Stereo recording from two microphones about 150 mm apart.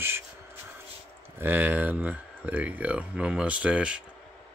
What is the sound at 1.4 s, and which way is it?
Speech, 15° right (ahead or behind).